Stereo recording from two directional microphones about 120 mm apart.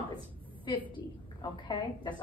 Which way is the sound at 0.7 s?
35° left (ahead or behind).